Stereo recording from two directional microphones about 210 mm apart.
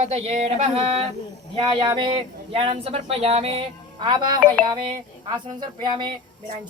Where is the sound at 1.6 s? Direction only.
20° right (ahead or behind).